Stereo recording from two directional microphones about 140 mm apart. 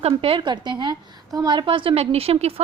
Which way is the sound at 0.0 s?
40° right (ahead or behind).